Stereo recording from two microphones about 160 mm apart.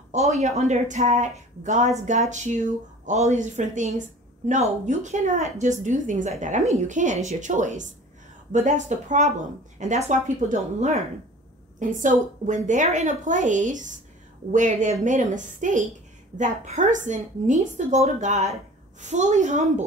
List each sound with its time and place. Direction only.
0.1 s a woman's voice: 45° right (ahead or behind)